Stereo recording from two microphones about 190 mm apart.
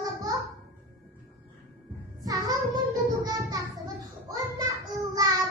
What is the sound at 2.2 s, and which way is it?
Child singing, 20° right (ahead or behind).